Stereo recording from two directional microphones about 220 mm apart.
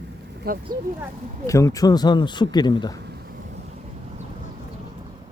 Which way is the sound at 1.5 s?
15° left (ahead or behind).